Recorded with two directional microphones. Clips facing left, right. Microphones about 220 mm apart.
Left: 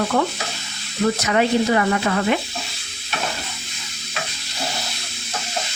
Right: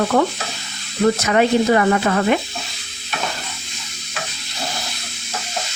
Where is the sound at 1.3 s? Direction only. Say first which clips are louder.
Right 2 dB; 50° right (ahead or behind).